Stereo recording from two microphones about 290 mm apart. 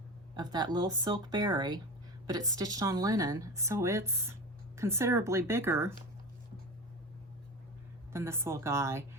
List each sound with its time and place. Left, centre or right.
0.3 s a woman's voice: centre
8.1 s a woman's voice: centre